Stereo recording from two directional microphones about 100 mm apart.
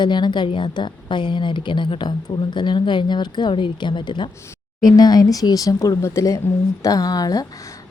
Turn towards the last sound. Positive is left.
turn(degrees=40)  # may be behind; listen again after turning